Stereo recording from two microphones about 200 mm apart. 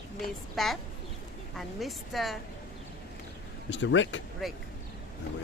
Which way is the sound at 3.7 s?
65° left (ahead or behind).